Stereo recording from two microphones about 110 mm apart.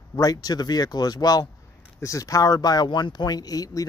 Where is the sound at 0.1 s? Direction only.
35° left (ahead or behind).